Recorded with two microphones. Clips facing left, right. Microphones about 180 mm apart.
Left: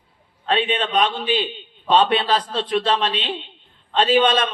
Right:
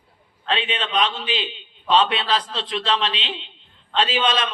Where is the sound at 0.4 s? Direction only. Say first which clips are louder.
Left 4 dB; 50° left (ahead or behind).